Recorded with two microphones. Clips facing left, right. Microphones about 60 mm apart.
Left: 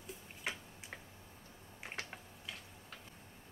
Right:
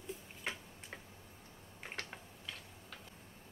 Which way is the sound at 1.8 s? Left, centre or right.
Centre.